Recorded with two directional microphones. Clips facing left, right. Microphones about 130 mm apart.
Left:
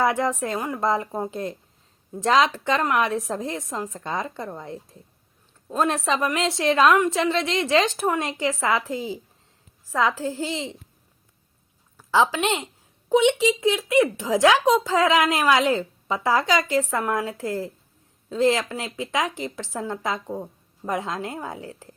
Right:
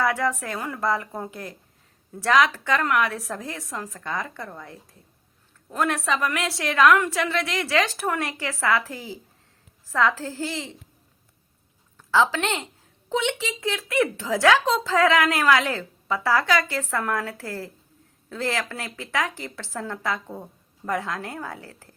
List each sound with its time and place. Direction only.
0.0 s speech: 20° left (ahead or behind)
11.9 s a woman's voice: 15° left (ahead or behind)